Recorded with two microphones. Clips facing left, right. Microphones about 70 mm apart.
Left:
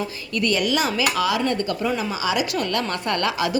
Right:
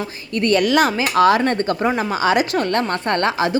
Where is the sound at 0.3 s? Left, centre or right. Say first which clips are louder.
Right 6 dB; right.